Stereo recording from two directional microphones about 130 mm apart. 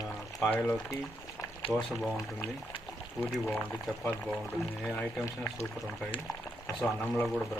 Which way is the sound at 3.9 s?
Centre (ahead or behind).